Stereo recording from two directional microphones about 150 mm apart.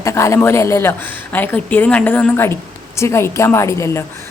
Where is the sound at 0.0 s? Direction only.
20° left (ahead or behind).